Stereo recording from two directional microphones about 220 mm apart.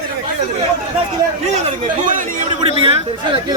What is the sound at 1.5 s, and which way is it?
Speech, 35° right (ahead or behind).